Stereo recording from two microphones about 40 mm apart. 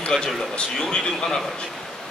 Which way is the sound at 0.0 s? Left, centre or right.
Centre.